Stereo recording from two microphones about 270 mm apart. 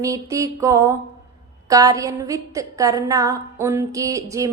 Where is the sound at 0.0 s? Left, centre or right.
Centre.